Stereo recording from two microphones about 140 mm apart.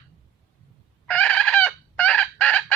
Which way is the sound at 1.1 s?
10° left (ahead or behind).